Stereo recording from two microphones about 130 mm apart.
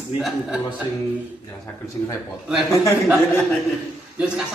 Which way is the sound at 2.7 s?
25° left (ahead or behind).